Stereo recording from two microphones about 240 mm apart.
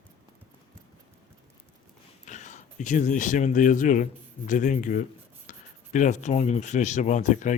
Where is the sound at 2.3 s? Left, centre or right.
Left.